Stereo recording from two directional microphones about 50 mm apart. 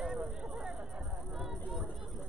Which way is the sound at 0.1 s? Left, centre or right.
Centre.